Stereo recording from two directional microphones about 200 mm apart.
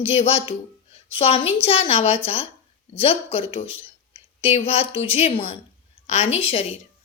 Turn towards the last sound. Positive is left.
turn(degrees=30)  # may be behind; listen again after turning